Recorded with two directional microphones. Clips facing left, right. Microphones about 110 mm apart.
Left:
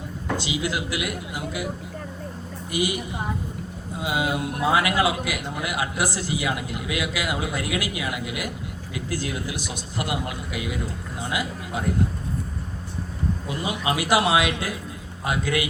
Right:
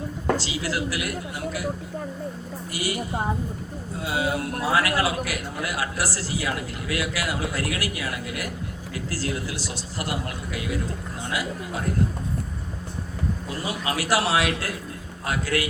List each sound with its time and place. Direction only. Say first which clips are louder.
0.3 s a man's voice: left 1 dB; 20° left (ahead or behind)
2.7 s a man's voice: left 4 dB; 20° left (ahead or behind)
4.0 s a man's voice: left 1 dB; 20° left (ahead or behind)
13.5 s a man's voice: left 4 dB; 20° left (ahead or behind)